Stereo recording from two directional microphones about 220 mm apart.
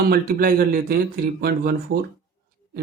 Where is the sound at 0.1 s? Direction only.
45° right (ahead or behind).